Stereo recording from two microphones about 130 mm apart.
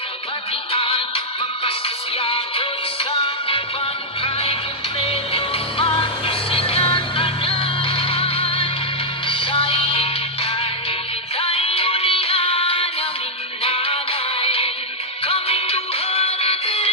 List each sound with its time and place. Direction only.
0.7 s music: 45° left (ahead or behind)